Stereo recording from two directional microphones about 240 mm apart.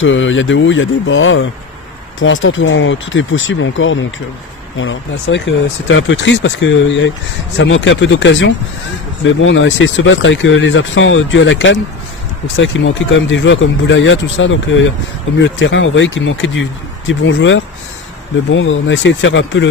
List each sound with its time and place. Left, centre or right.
0.0 s speech: left